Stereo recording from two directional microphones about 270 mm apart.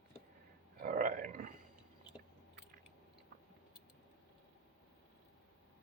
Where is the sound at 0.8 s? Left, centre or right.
Right.